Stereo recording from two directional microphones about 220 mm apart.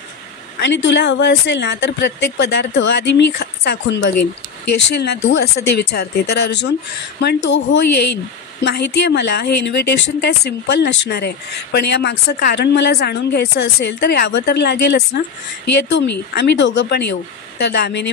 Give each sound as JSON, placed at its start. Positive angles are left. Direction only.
{"t": 0.6, "sound": "a woman's voice", "side_deg": 55}